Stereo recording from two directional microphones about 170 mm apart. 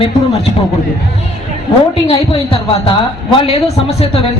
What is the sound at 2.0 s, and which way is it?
Speech, 35° left (ahead or behind).